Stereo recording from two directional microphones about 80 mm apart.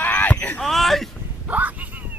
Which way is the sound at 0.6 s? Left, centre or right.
Centre.